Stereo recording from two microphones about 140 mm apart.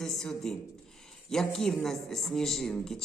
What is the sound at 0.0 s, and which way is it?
Speech, 5° left (ahead or behind).